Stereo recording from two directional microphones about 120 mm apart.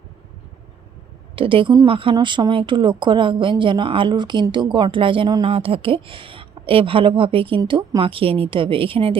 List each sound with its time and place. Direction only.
1.4 s a woman's voice: 45° right (ahead or behind)